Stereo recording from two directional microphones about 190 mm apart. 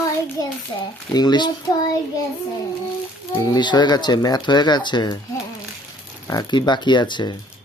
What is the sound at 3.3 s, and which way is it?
Speech, 20° left (ahead or behind).